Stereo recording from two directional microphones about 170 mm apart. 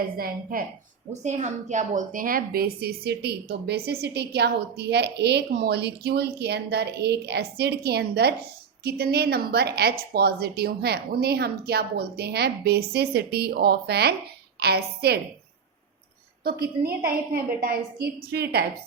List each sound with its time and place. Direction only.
0.2 s a woman's voice: 60° right (ahead or behind)
1.2 s a woman's voice: 45° right (ahead or behind); by 15.2 s 70° right (ahead or behind)
16.4 s a woman's voice: 65° right (ahead or behind)